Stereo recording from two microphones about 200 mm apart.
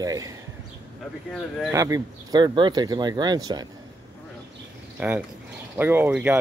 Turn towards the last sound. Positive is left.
turn(degrees=-5)  # may be behind; listen again after turning